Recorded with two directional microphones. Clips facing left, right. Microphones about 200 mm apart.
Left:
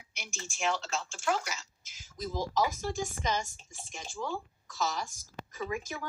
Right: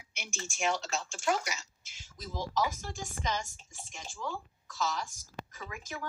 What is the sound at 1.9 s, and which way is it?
Speech, 40° left (ahead or behind).